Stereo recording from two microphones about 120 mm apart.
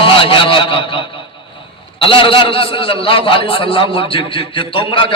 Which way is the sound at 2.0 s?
45° left (ahead or behind).